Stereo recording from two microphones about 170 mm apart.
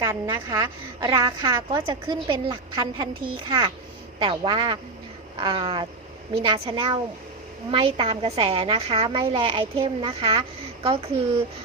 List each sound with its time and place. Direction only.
0.0 s a woman's voice: 15° right (ahead or behind); by 10.2 s 35° right (ahead or behind)